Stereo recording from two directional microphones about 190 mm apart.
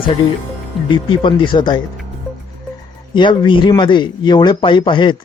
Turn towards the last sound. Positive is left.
turn(degrees=25)  # may be behind; listen again after turning